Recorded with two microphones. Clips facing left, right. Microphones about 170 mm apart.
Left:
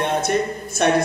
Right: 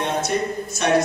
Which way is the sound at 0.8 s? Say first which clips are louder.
Left 2 dB; 55° left (ahead or behind).